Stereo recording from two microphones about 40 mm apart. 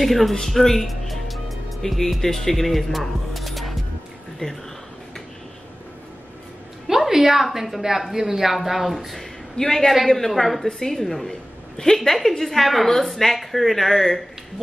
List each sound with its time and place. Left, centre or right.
0.0 s speech: centre
4.4 s speech: left
6.9 s a woman's voice: centre
9.6 s a man's voice: centre